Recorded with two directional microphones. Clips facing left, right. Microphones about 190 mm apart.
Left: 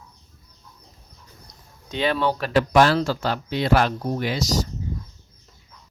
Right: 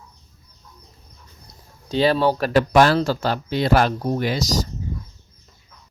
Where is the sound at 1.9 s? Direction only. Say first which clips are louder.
Right 5 dB; 35° right (ahead or behind).